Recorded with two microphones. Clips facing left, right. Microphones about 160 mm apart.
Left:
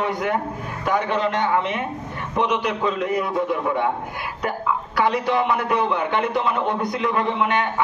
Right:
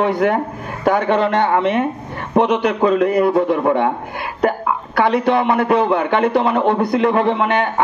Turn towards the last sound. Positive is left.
turn(degrees=-55)  # may be behind; listen again after turning